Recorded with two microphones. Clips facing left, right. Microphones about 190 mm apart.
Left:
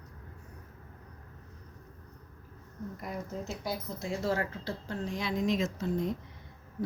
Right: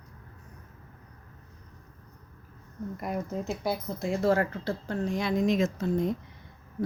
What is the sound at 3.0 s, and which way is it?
Speech, 60° right (ahead or behind).